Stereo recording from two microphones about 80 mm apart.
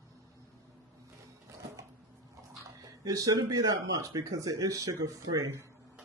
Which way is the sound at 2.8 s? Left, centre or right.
Right.